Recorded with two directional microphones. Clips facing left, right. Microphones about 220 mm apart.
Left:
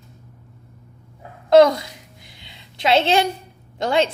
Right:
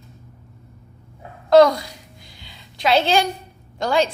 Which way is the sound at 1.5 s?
20° left (ahead or behind).